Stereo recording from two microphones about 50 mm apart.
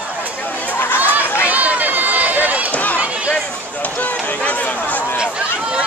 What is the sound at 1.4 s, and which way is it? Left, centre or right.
Run, right.